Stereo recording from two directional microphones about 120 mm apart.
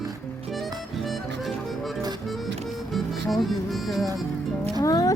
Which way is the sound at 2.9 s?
Centre (ahead or behind).